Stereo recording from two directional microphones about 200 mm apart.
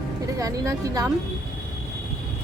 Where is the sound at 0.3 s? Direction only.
15° right (ahead or behind).